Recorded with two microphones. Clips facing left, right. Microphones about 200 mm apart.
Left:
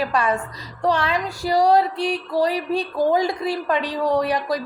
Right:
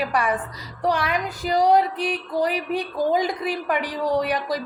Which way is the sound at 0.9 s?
15° right (ahead or behind).